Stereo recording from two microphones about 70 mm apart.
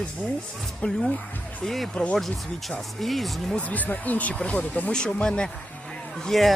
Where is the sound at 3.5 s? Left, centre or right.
Left.